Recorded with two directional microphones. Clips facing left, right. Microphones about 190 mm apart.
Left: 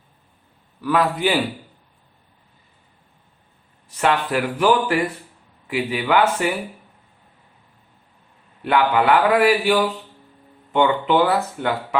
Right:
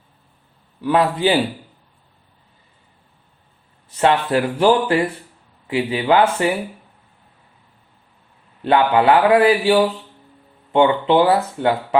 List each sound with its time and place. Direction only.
0.8 s speech: 30° right (ahead or behind)
3.9 s speech: 25° right (ahead or behind)
8.6 s speech: 25° right (ahead or behind)